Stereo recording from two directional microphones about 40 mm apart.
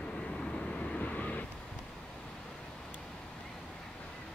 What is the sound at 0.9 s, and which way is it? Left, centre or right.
Vehicle, left.